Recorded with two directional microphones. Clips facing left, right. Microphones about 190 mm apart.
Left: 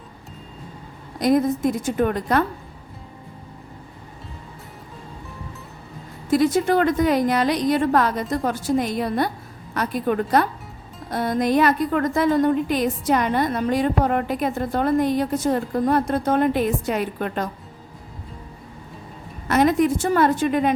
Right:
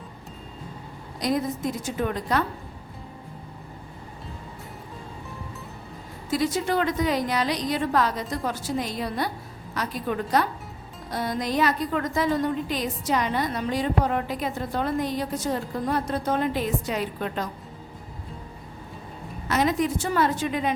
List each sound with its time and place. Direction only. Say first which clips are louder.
1.2 s a woman's voice: left 7 dB; 50° left (ahead or behind)
6.3 s a woman's voice: left 6 dB; 50° left (ahead or behind)
19.5 s a woman's voice: left 6 dB; 55° left (ahead or behind)